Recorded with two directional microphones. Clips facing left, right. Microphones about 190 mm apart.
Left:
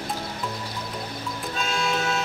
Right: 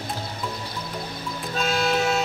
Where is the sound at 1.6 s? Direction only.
40° right (ahead or behind).